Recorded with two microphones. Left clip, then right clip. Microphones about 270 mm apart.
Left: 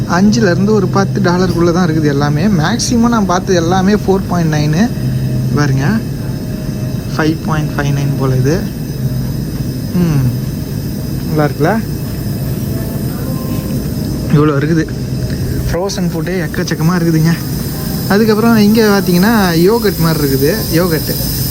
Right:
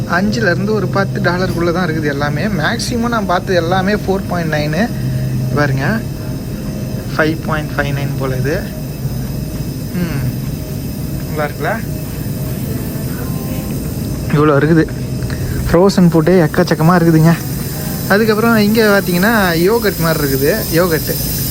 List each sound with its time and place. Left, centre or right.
0.1 s speech: centre
7.2 s speech: centre
11.3 s speech: left
14.3 s speech: centre
15.7 s speech: right
16.3 s speech: centre
20.0 s speech: centre